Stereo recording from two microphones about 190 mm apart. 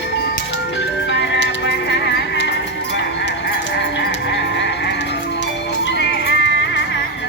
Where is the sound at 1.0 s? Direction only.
65° left (ahead or behind).